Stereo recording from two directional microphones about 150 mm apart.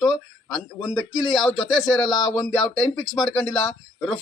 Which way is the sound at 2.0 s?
30° left (ahead or behind).